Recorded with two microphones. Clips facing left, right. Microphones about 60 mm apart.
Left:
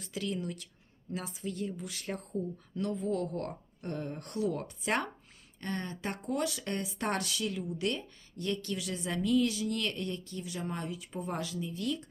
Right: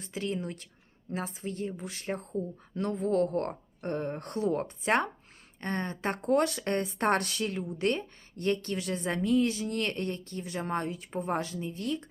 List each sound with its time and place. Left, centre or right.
0.0 s speech: right
2.7 s speech: right